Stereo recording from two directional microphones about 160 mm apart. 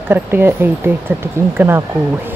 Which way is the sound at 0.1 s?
15° right (ahead or behind).